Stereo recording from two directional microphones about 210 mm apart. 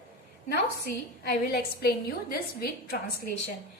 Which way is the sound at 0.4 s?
50° left (ahead or behind).